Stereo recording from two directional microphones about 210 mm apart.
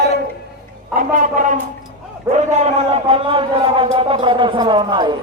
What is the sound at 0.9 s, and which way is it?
A woman's voice, 40° right (ahead or behind).